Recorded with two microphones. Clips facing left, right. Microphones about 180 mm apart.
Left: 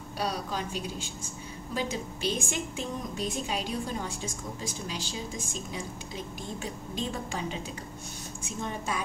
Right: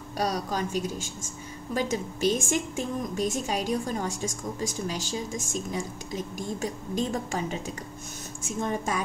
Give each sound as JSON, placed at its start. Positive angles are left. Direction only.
{"t": 0.2, "sound": "a woman's voice", "side_deg": -45}
{"t": 8.5, "sound": "a woman's voice", "side_deg": -45}